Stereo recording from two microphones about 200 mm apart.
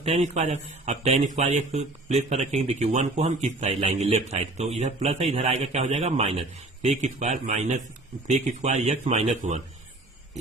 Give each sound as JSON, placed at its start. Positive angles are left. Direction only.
{"t": 0.0, "sound": "a man's voice", "side_deg": -35}